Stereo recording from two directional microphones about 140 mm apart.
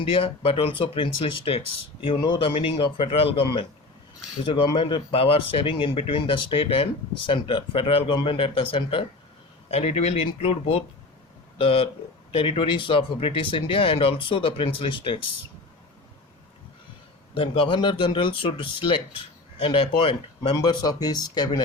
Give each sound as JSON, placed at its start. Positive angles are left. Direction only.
{"t": 0.0, "sound": "speech", "side_deg": 40}
{"t": 17.3, "sound": "speech", "side_deg": 40}
{"t": 20.6, "sound": "speech", "side_deg": 30}